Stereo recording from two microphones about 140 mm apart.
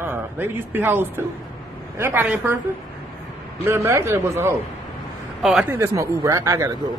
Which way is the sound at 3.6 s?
15° right (ahead or behind).